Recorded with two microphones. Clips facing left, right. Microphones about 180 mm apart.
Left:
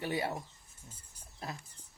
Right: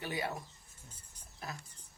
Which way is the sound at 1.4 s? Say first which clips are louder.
Left 2 dB; 25° left (ahead or behind).